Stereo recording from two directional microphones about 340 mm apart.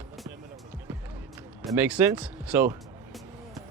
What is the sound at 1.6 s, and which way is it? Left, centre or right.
Music, centre.